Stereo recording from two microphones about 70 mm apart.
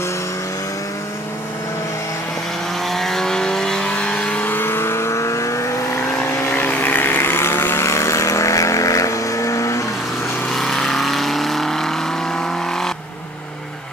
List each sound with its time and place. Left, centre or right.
2.9 s vehicle: centre
4.6 s vehicle: left
6.5 s vehicle: left
10.5 s vehicle: centre